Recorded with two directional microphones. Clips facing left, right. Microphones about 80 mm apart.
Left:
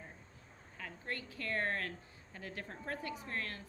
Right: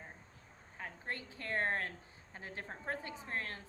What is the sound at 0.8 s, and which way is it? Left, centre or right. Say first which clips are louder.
A woman's voice: even; right.